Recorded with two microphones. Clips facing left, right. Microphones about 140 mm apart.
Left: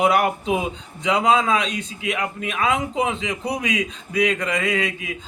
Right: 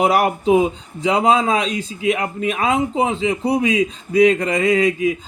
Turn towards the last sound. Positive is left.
turn(degrees=-35)  # may be behind; listen again after turning